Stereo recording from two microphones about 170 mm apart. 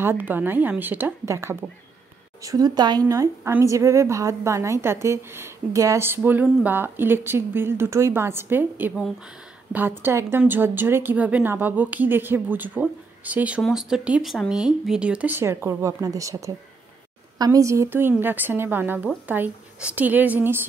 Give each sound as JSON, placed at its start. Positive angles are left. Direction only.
{"t": 0.0, "sound": "speech", "side_deg": -10}